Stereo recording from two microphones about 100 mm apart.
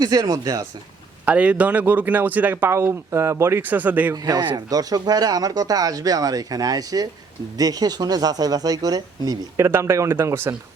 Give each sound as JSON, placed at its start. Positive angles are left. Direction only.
{"t": 0.0, "sound": "speech", "side_deg": -40}
{"t": 1.2, "sound": "a man's voice", "side_deg": -15}
{"t": 4.1, "sound": "speech", "side_deg": -40}
{"t": 9.6, "sound": "speech", "side_deg": -25}